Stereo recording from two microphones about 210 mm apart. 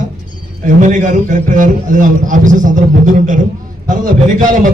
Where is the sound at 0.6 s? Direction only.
35° right (ahead or behind).